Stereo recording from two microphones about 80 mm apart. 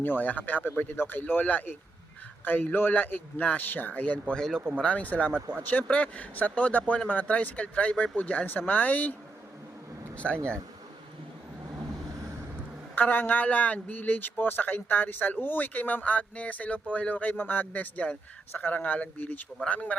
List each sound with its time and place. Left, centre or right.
0.0 s a man's voice: left
4.4 s speech: centre
4.8 s a man's voice: centre
10.2 s speech: centre
13.0 s a man's voice: left